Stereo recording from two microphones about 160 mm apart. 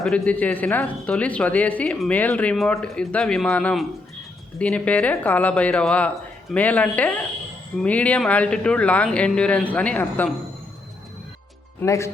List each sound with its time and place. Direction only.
0.0 s speech: 5° left (ahead or behind)
11.8 s speech: 15° left (ahead or behind)